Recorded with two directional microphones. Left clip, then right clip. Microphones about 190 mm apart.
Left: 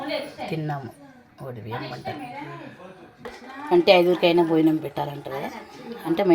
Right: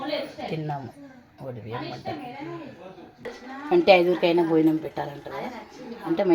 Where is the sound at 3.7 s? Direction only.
10° left (ahead or behind).